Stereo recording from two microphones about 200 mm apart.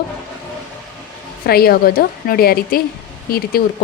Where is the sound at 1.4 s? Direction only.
50° left (ahead or behind).